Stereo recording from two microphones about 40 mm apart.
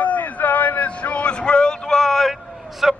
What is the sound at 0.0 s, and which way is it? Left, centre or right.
Vehicle, left.